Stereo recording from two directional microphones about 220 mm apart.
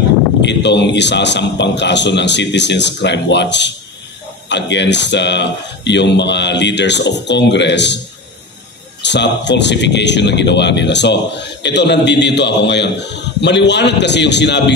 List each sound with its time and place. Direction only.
0.4 s speech: 50° left (ahead or behind)
9.0 s speech: 50° left (ahead or behind)